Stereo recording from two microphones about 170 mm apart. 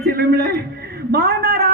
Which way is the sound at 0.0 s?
70° right (ahead or behind).